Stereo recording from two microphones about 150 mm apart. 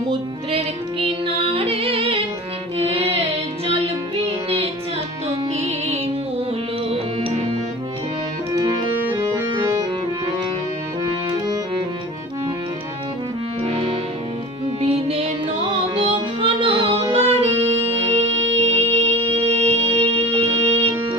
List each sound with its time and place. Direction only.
0.5 s music: 40° right (ahead or behind)
5.5 s music: 45° right (ahead or behind)
11.3 s music: 25° right (ahead or behind)
13.6 s brass instrument: 40° right (ahead or behind)
14.8 s music: 40° right (ahead or behind)